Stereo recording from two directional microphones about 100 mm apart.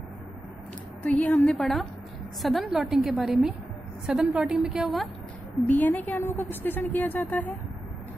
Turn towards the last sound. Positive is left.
turn(degrees=20)  # may be behind; listen again after turning